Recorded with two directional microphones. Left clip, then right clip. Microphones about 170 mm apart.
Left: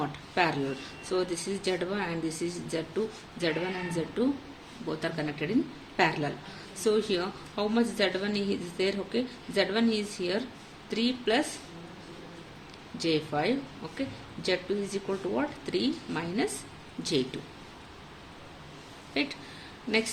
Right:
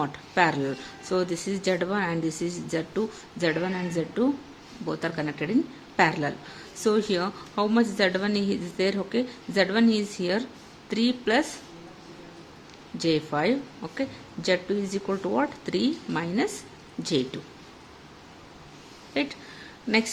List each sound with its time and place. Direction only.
0.0 s speech: 45° right (ahead or behind)
13.0 s speech: 50° right (ahead or behind)
19.1 s speech: 45° right (ahead or behind)